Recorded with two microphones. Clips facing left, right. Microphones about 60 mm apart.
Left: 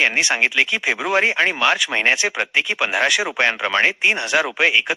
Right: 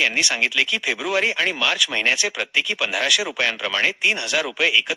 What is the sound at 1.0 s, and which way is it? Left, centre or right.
Speech, left.